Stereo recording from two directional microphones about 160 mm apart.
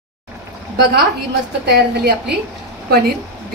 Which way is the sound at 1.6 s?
90° right.